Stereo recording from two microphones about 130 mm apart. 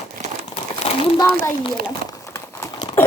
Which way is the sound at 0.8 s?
45° left (ahead or behind).